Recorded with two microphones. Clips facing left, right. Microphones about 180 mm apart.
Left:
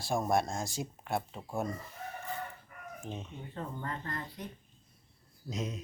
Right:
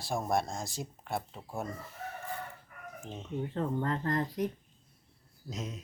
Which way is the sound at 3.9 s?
45° right (ahead or behind).